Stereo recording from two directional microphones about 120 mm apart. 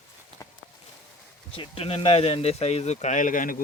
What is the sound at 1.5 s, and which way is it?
Speech, 50° left (ahead or behind).